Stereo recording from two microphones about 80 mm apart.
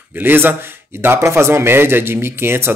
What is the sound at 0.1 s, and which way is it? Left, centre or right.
A man's voice, right.